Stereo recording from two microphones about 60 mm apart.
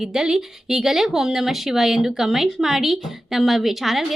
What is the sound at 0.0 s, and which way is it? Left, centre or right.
Speech, centre.